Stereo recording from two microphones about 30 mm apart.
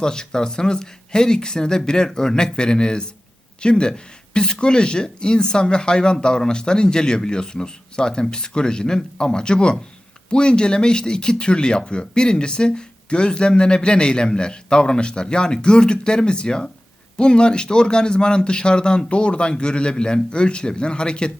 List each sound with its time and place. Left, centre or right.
0.0 s speech: left